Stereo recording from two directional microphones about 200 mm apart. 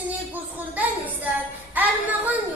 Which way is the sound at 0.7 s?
10° right (ahead or behind).